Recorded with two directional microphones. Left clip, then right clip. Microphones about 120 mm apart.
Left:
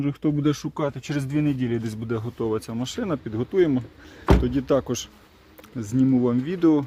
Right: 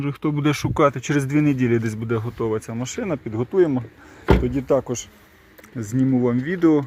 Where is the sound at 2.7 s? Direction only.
20° left (ahead or behind).